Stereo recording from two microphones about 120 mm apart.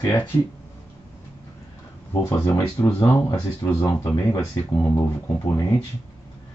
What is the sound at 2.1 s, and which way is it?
Speech, 20° left (ahead or behind).